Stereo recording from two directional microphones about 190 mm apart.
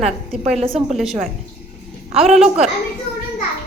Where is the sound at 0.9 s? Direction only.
Centre (ahead or behind).